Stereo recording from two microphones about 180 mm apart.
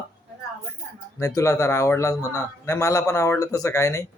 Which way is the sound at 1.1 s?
15° left (ahead or behind).